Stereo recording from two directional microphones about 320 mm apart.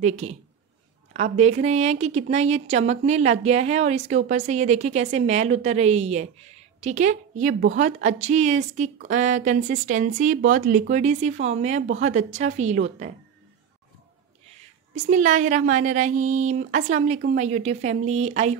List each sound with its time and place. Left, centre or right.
0.0 s a woman's voice: right
15.0 s a woman's voice: right